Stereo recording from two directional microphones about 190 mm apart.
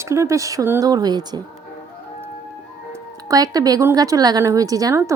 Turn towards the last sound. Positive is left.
turn(degrees=-15)  # may be behind; listen again after turning